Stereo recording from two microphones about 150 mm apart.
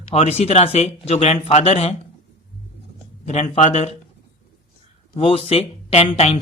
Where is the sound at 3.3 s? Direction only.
45° left (ahead or behind).